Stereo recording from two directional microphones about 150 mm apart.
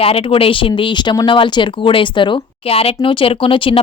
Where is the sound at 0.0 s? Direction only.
40° left (ahead or behind).